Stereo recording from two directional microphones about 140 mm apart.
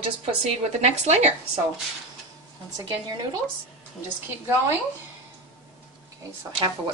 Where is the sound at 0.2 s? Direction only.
50° right (ahead or behind).